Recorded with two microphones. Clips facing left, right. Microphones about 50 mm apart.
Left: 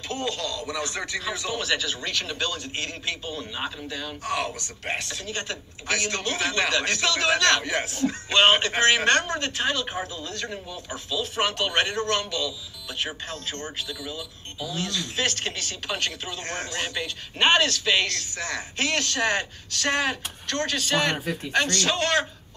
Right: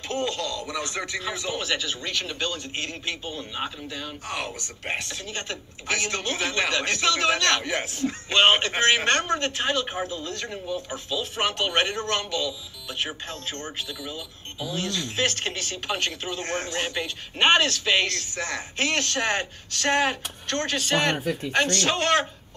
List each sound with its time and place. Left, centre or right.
0.2 s a man's voice: centre; by 22.2 s right